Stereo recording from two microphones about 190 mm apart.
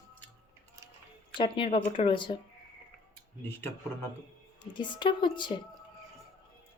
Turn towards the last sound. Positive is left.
turn(degrees=25)  # may be behind; listen again after turning